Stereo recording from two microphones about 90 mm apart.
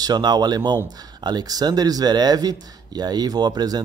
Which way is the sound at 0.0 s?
50° right (ahead or behind).